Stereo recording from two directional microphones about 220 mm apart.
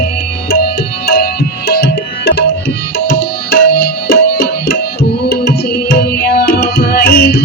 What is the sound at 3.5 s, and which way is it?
Tabla, 45° left (ahead or behind).